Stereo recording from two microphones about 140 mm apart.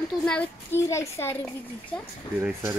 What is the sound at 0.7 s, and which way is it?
Speech, 20° left (ahead or behind).